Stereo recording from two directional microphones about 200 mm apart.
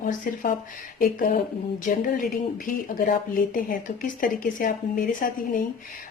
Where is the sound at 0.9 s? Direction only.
50° left (ahead or behind).